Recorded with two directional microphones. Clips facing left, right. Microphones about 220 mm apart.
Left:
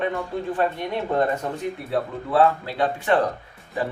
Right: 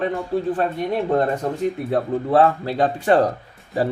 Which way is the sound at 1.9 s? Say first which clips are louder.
Right 4 dB; 45° right (ahead or behind).